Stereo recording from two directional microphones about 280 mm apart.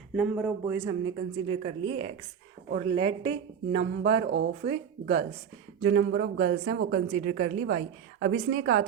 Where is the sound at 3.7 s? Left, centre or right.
Right.